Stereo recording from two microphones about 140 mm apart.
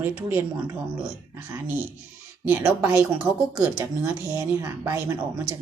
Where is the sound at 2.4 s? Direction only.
10° right (ahead or behind).